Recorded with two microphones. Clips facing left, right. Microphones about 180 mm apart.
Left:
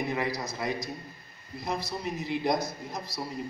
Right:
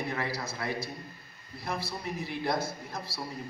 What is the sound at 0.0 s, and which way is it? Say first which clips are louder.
A man's voice: left 3 dB; 20° left (ahead or behind).